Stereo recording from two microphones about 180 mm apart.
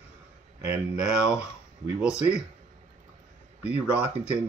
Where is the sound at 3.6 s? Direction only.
10° right (ahead or behind).